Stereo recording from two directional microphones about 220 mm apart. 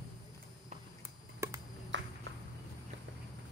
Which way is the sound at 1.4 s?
10° right (ahead or behind).